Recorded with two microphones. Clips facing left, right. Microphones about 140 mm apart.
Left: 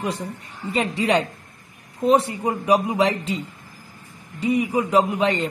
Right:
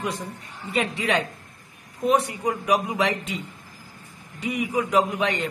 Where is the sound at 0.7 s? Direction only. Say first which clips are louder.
Left 3 dB; 35° left (ahead or behind).